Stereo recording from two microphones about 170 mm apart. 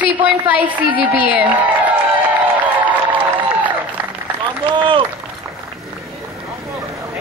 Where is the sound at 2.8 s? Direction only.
10° right (ahead or behind).